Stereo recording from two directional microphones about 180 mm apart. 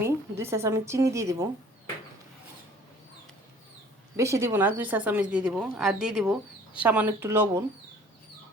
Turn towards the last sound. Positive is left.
turn(degrees=-15)  # may be behind; listen again after turning